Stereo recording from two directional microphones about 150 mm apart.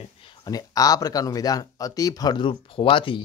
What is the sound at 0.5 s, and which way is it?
Speech, 25° left (ahead or behind).